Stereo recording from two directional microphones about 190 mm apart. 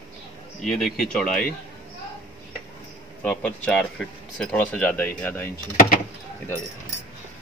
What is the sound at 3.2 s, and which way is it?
Speech, 5° left (ahead or behind).